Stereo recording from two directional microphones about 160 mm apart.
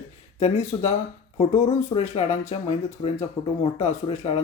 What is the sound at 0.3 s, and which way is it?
Speech, 45° left (ahead or behind).